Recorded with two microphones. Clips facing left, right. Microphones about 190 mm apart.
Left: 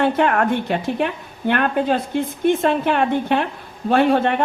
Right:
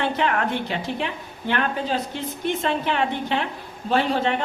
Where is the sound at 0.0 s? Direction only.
50° left (ahead or behind).